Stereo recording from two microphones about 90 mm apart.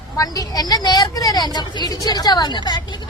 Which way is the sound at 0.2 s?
45° left (ahead or behind).